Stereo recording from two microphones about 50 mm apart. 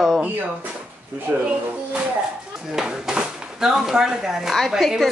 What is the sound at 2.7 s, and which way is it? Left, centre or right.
Speech, centre.